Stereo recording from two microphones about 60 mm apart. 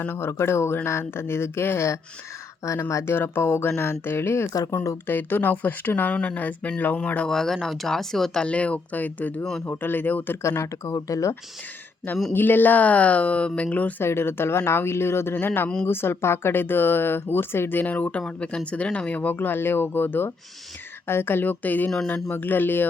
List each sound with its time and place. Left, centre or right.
0.0 s speech: left
2.6 s speech: left
3.0 s speech: left
4.7 s speech: left
5.0 s speech: left
7.3 s speech: centre; by 9.4 s left
9.4 s speech: centre
9.6 s speech: left
10.6 s speech: left
12.3 s speech: left
14.0 s speech: left